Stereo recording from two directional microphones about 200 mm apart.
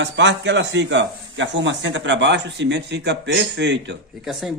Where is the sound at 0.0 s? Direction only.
65° right (ahead or behind).